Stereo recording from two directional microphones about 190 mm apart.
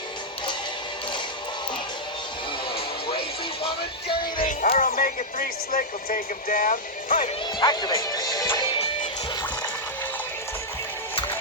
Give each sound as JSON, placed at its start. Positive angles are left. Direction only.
{"t": 2.7, "sound": "music", "side_deg": 30}
{"t": 4.4, "sound": "speech", "side_deg": 45}
{"t": 7.6, "sound": "speech", "side_deg": 20}